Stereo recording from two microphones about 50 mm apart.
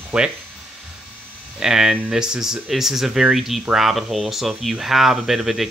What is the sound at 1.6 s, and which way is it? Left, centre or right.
Speech, centre.